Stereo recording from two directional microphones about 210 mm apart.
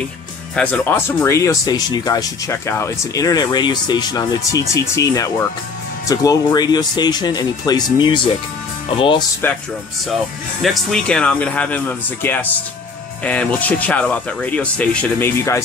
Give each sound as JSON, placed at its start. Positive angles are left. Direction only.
{"t": 0.6, "sound": "speech", "side_deg": 5}
{"t": 10.6, "sound": "speech", "side_deg": 0}